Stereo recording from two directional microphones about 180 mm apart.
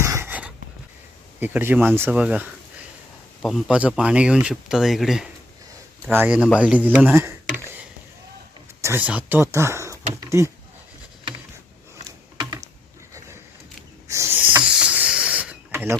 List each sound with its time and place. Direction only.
0.0 s writing: 15° right (ahead or behind)
1.4 s speech: 10° right (ahead or behind)
8.8 s speech: 10° right (ahead or behind)
12.4 s a sound: 20° right (ahead or behind)
14.1 s snake: 15° right (ahead or behind)